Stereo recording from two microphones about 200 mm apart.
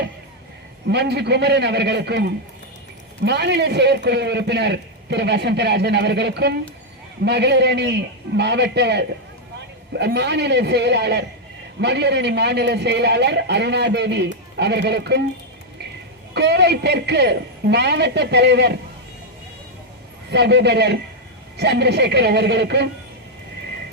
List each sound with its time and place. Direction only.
0.9 s a man's voice: 55° right (ahead or behind)
16.3 s a man's voice: 55° right (ahead or behind)
20.3 s a man's voice: 60° right (ahead or behind)